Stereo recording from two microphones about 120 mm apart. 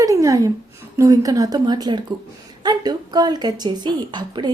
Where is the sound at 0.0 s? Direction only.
25° right (ahead or behind).